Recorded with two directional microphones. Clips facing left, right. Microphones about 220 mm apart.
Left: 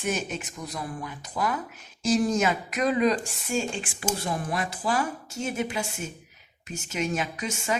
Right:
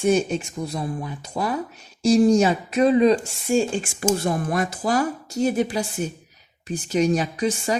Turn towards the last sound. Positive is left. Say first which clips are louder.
# right 7 dB
turn(degrees=-35)  # may be behind; listen again after turning